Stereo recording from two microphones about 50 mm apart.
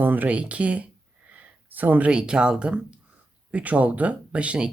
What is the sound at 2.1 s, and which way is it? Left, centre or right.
Speech, centre.